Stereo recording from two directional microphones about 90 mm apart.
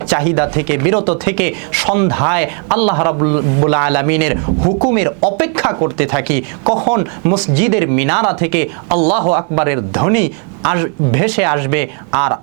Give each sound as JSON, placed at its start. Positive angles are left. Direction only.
{"t": 0.1, "sound": "speech", "side_deg": -15}